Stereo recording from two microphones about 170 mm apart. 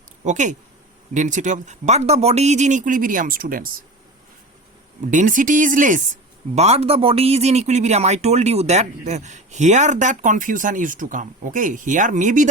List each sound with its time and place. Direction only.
0.3 s speech: 45° right (ahead or behind)
5.1 s speech: 50° right (ahead or behind)
6.6 s speech: 40° right (ahead or behind)